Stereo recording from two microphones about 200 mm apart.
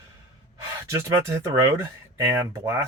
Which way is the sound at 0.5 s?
15° right (ahead or behind).